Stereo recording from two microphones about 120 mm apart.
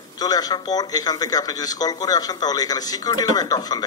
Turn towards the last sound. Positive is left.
turn(degrees=35)  # may be behind; listen again after turning